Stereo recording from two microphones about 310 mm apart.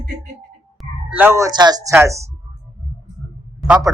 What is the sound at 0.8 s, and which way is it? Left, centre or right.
Speech, centre.